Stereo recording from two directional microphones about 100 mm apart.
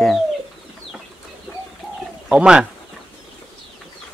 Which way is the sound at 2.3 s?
10° right (ahead or behind).